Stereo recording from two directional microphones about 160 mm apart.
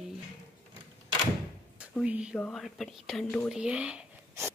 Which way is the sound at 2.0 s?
5° right (ahead or behind).